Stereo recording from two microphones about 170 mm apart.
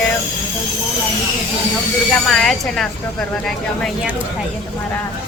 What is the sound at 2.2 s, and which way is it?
Speech, centre (ahead or behind).